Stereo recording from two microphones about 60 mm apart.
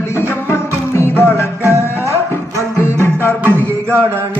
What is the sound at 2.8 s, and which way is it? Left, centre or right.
Music, left.